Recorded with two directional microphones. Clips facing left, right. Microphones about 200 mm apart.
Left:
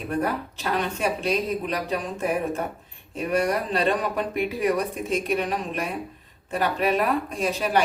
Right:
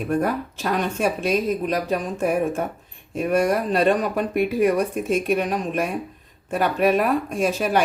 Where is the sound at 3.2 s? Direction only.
45° right (ahead or behind).